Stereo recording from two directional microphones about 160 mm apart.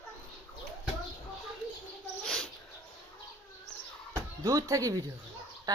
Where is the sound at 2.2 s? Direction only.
5° left (ahead or behind).